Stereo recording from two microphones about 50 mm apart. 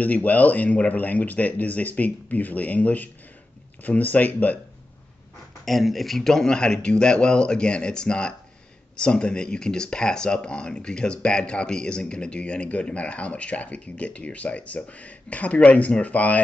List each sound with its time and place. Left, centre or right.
0.0 s speech: left
5.7 s speech: centre; by 16.4 s left